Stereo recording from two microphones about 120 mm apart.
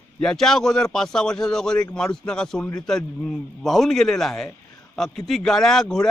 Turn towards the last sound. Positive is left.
turn(degrees=5)  # may be behind; listen again after turning